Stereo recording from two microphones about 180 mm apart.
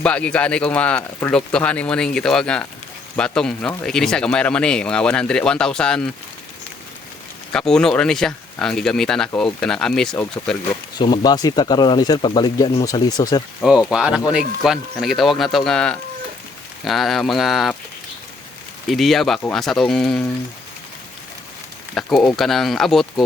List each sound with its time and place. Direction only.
0.0 s speech: 5° left (ahead or behind)
7.5 s speech: 5° left (ahead or behind)
10.9 s speech: 25° left (ahead or behind)
13.6 s speech: 5° right (ahead or behind)
18.9 s speech: centre (ahead or behind)
21.9 s speech: centre (ahead or behind)